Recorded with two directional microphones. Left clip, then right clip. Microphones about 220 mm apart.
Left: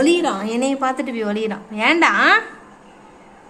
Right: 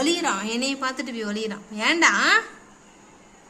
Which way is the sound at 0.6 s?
20° right (ahead or behind).